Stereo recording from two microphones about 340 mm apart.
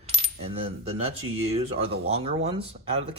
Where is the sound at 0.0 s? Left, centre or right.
Centre.